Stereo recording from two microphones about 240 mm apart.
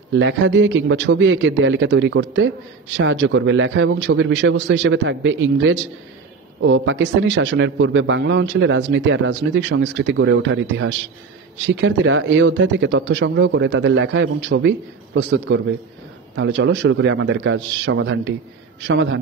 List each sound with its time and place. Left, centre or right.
0.1 s a man's voice: right